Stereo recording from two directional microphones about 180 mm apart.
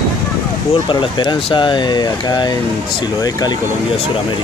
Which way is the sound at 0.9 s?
25° left (ahead or behind).